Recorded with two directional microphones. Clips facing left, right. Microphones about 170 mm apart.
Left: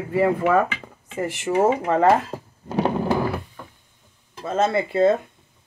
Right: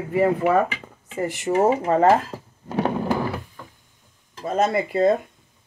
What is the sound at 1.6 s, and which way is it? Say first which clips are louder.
Speech: even; 15° right (ahead or behind).